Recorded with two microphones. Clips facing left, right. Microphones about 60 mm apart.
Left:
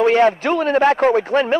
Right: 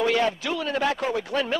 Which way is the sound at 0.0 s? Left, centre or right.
Left.